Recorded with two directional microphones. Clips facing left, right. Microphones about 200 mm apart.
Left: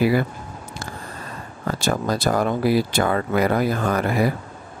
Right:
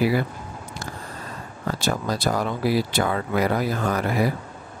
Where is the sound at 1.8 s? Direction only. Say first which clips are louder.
Left 3 dB; 50° left (ahead or behind).